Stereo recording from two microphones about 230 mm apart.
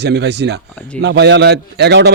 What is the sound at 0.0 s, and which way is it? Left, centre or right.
A man's voice, right.